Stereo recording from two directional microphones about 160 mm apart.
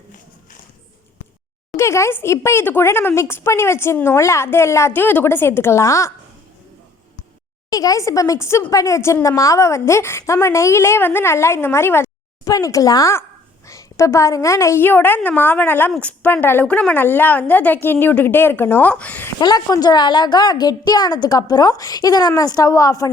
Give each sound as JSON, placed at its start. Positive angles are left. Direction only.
{"t": 1.7, "sound": "speech", "side_deg": 15}
{"t": 7.7, "sound": "speech", "side_deg": 20}
{"t": 19.4, "sound": "a woman's voice", "side_deg": 25}